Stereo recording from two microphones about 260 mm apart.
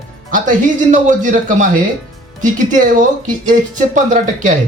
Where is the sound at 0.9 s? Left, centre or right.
Right.